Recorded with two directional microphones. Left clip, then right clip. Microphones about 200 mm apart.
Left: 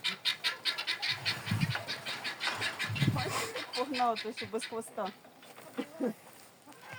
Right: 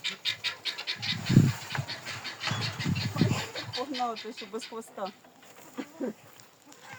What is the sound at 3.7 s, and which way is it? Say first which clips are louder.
Speech: left 2 dB; 15° right (ahead or behind).